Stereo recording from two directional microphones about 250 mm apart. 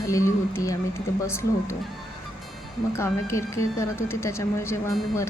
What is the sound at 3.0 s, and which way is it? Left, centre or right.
A woman's voice, centre.